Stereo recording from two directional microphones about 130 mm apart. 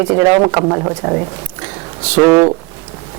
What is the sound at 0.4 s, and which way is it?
Speech, 30° right (ahead or behind).